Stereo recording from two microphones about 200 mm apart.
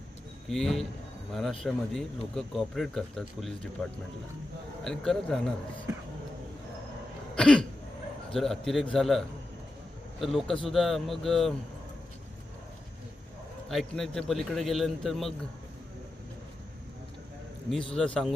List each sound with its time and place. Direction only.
0.4 s speech: centre (ahead or behind)
4.8 s speech: 5° left (ahead or behind)
7.3 s throat clearing: 5° left (ahead or behind)
8.3 s speech: centre (ahead or behind)
13.7 s speech: centre (ahead or behind)
17.7 s speech: 5° left (ahead or behind)